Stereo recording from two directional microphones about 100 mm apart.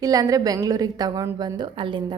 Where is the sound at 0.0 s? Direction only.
35° right (ahead or behind).